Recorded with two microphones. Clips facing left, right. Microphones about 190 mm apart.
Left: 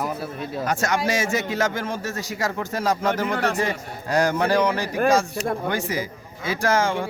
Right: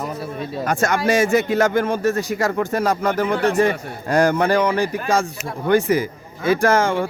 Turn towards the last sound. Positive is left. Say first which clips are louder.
# right 4 dB
turn(degrees=-55)  # may be behind; listen again after turning